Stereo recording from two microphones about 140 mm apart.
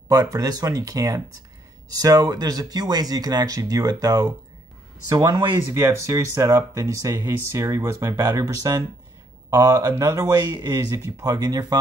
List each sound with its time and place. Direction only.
0.1 s speech: 25° right (ahead or behind)